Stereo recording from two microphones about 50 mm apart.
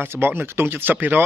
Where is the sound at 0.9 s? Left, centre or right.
Right.